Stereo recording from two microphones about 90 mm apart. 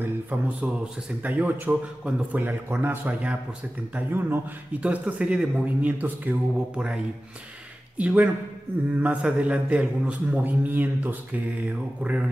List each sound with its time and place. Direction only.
0.0 s a man's voice: 20° right (ahead or behind)
8.0 s a man's voice: 15° right (ahead or behind)